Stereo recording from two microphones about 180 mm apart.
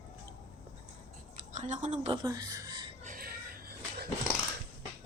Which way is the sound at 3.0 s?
55° right (ahead or behind).